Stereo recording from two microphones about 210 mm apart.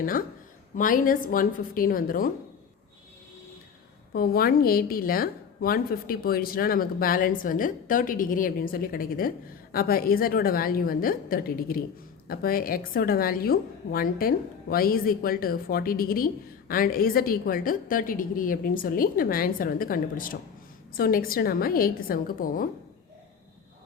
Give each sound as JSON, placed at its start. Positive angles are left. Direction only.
{"t": 0.8, "sound": "a woman's voice", "side_deg": 40}
{"t": 4.1, "sound": "a woman's voice", "side_deg": 45}